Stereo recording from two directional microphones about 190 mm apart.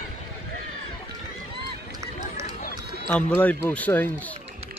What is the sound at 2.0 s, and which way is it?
Run, 15° right (ahead or behind).